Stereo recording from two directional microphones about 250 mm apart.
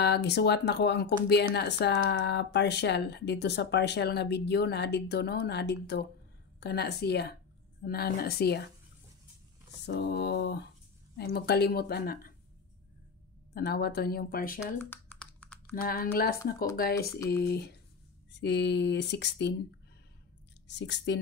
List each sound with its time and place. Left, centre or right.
0.0 s speech: left
9.8 s speech: left
13.6 s speech: left
14.8 s computer keyboard: centre
15.7 s speech: left
20.6 s speech: left